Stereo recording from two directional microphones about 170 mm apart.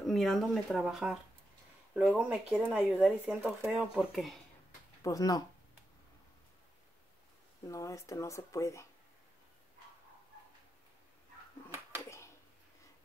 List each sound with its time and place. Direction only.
0.0 s speech: centre (ahead or behind)
5.0 s speech: 20° left (ahead or behind)
7.6 s speech: 20° left (ahead or behind)